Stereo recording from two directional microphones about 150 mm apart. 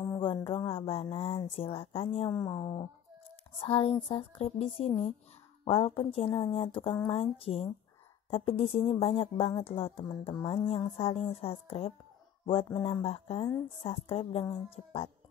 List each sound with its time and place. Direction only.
0.2 s a sound: 35° left (ahead or behind)
1.1 s speech: 40° left (ahead or behind)
2.3 s speech: 25° left (ahead or behind)
3.5 s speech: 40° left (ahead or behind)